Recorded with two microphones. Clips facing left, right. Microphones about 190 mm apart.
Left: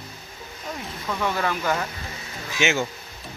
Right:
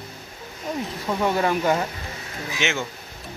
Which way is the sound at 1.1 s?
25° right (ahead or behind).